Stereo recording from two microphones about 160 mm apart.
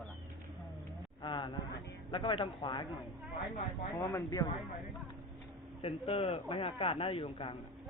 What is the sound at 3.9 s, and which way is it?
Speech, 20° left (ahead or behind).